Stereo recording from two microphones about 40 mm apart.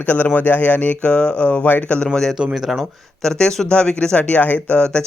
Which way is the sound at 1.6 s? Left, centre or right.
Left.